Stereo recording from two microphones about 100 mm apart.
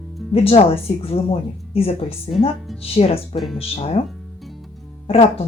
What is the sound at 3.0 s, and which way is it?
Speech, 90° left.